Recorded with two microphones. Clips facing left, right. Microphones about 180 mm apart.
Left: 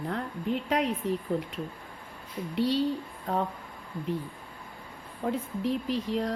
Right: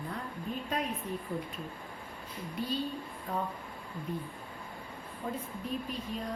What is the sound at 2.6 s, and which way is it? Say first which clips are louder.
Speech: left 8 dB; 80° left.